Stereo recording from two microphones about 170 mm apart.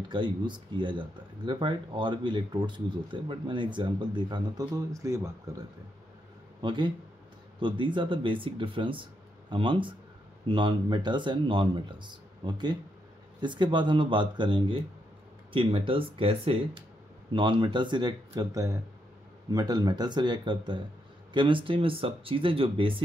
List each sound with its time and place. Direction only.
0.1 s speech: 25° right (ahead or behind)